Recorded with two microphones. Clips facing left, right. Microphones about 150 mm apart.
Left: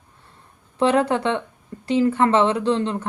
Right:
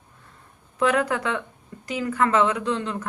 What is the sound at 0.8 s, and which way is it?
Speech, 30° left (ahead or behind).